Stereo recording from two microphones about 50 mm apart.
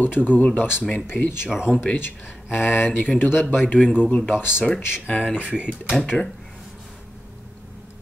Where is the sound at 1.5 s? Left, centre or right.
Centre.